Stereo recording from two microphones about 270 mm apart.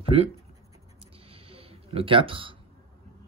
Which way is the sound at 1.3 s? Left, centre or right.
Right.